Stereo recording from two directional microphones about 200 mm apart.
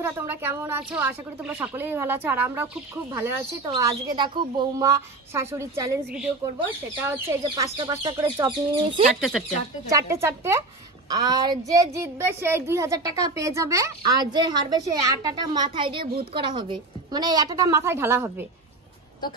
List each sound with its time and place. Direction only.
0.0 s a woman's voice: 10° right (ahead or behind)
3.6 s a woman's voice: 25° right (ahead or behind)
7.4 s speech: 20° right (ahead or behind)
9.1 s speech: centre (ahead or behind)
9.8 s a woman's voice: 15° right (ahead or behind)